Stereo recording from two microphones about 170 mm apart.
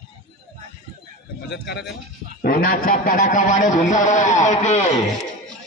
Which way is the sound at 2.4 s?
60° left (ahead or behind).